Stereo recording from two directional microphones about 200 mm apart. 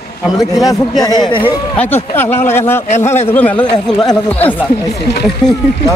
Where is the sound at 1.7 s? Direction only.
10° left (ahead or behind).